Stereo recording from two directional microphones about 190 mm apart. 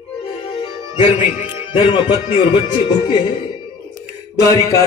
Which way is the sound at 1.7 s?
25° left (ahead or behind).